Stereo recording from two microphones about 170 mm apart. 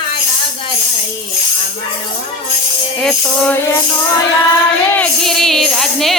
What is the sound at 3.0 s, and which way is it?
Music, 5° left (ahead or behind).